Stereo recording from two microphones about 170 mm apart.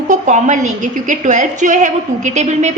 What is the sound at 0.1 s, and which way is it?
A woman's voice, 45° right (ahead or behind).